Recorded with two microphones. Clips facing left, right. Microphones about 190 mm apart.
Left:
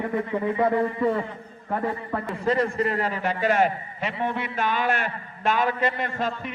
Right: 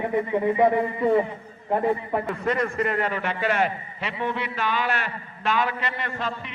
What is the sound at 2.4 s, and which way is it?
A man's voice, 30° left (ahead or behind).